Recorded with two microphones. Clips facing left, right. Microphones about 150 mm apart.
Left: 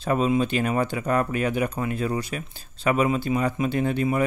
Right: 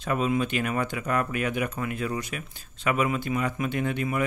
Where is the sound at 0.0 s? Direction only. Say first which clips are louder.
Left 4 dB; 30° left (ahead or behind).